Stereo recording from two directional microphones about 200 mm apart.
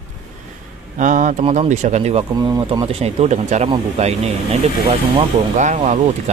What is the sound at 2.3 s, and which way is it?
Speech, 20° right (ahead or behind).